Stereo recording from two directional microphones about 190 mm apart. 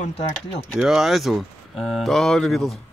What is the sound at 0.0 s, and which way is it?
Speech, 40° left (ahead or behind).